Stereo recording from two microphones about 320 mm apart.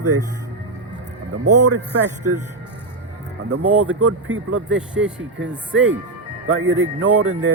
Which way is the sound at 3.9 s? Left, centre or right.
Right.